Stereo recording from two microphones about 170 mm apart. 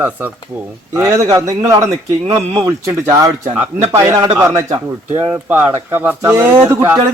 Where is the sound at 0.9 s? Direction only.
20° right (ahead or behind).